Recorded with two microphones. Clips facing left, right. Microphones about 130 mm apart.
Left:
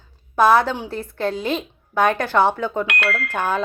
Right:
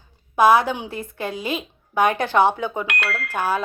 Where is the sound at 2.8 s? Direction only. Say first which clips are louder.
Left 3 dB; 90° left.